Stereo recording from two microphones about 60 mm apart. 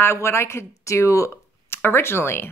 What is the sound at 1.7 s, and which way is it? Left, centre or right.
Speech, left.